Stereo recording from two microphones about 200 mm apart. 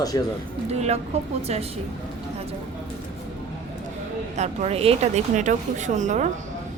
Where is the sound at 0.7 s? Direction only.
30° right (ahead or behind).